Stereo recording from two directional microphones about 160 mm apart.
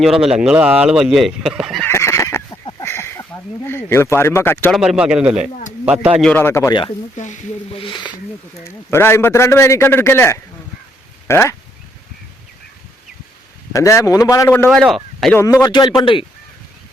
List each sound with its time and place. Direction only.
0.0 s speech: centre (ahead or behind)
1.9 s fowl: 15° left (ahead or behind)
2.8 s a sound: 15° left (ahead or behind)
3.7 s a man's voice: 15° left (ahead or behind)
4.7 s a man's voice: 5° right (ahead or behind)
6.3 s a man's voice: 15° left (ahead or behind)
7.2 s speech: 50° left (ahead or behind)
7.8 s a man's voice: 30° left (ahead or behind)
8.5 s a man's voice: 15° left (ahead or behind)
13.7 s a man's voice: 20° left (ahead or behind)
14.7 s speech: centre (ahead or behind)
15.4 s a man's voice: 20° left (ahead or behind)